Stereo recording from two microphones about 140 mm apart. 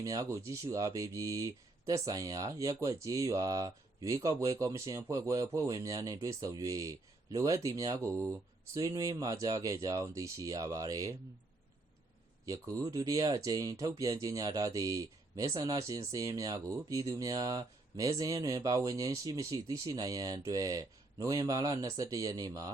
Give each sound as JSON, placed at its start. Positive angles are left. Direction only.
{"t": 0.0, "sound": "speech", "side_deg": -25}
{"t": 12.5, "sound": "speech", "side_deg": -25}